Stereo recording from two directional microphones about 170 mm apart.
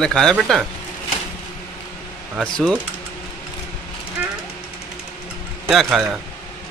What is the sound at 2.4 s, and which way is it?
Speech, centre (ahead or behind).